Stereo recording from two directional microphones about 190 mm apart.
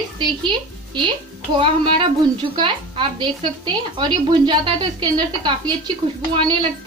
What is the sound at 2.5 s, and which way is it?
A woman's voice, 25° right (ahead or behind).